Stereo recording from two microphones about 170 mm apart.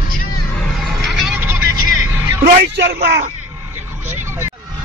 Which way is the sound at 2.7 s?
75° right (ahead or behind).